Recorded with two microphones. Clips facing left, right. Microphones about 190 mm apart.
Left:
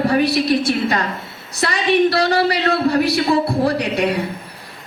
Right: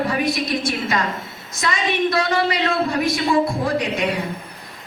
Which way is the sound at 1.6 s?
35° left (ahead or behind).